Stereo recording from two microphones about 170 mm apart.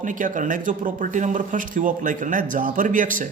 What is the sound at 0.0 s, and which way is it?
Speech, 50° right (ahead or behind).